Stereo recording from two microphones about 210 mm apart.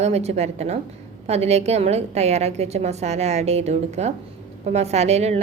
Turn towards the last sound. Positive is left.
turn(degrees=-30)  # may be behind; listen again after turning